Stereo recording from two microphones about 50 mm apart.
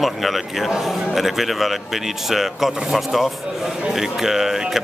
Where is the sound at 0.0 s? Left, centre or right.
Centre.